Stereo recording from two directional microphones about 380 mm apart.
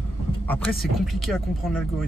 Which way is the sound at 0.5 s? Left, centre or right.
Centre.